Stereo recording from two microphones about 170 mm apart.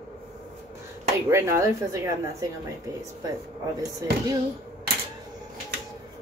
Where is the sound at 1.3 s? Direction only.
15° right (ahead or behind).